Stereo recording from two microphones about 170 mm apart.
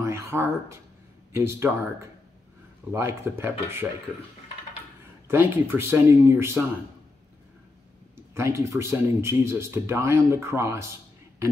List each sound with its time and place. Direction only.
0.0 s speech: 15° right (ahead or behind)
5.3 s speech: 15° right (ahead or behind)
8.4 s speech: 15° right (ahead or behind)